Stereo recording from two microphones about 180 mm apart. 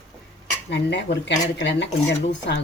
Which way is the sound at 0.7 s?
75° left (ahead or behind).